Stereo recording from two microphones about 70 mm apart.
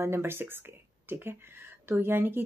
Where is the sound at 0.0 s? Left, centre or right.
Right.